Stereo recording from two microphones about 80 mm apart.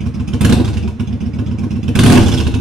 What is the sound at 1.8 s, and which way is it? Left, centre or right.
Vehicle, centre.